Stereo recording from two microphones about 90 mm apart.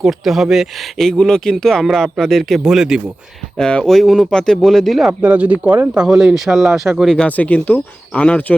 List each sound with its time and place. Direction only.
0.0 s speech: 5° right (ahead or behind)
3.6 s speech: 10° left (ahead or behind)
5.2 s speech: 20° right (ahead or behind)
6.0 s speech: 5° right (ahead or behind)
7.3 s speech: 15° left (ahead or behind)